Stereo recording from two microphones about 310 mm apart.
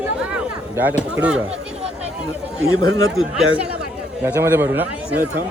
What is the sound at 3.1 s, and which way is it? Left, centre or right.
A man's voice, centre.